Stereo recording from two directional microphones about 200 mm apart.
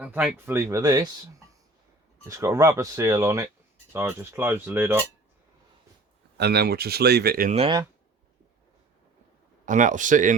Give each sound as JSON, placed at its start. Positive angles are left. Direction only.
{"t": 0.0, "sound": "speech", "side_deg": -10}
{"t": 2.2, "sound": "speech", "side_deg": -15}
{"t": 6.3, "sound": "speech", "side_deg": -55}
{"t": 7.5, "sound": "speech", "side_deg": -30}
{"t": 9.6, "sound": "speech", "side_deg": -40}